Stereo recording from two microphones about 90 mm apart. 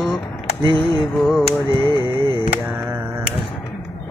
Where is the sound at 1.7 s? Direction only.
65° right (ahead or behind).